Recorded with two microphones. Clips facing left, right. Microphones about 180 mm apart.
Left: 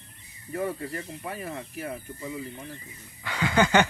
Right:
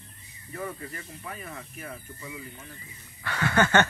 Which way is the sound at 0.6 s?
30° left (ahead or behind).